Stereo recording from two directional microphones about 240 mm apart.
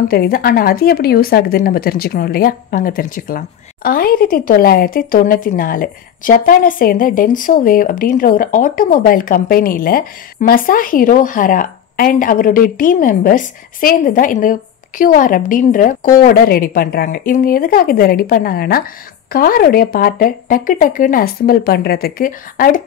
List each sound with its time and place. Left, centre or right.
0.1 s a woman's voice: left